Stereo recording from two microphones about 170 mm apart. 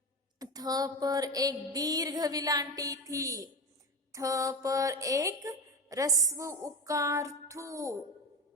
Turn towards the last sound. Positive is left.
turn(degrees=-15)  # may be behind; listen again after turning